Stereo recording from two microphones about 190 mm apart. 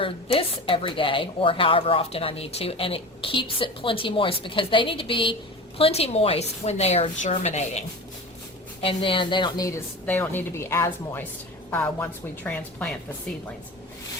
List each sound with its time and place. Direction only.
0.0 s a woman's voice: 30° left (ahead or behind); by 12.9 s 10° left (ahead or behind)